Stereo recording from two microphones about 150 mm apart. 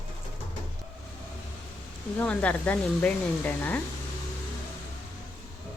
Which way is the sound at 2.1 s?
10° left (ahead or behind).